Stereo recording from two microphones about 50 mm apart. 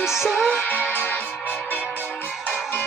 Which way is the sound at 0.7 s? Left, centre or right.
Left.